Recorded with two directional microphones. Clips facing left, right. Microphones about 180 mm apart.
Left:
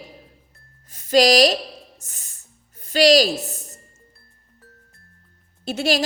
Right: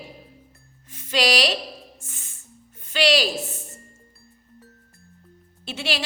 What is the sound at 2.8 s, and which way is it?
Speech, 40° left (ahead or behind).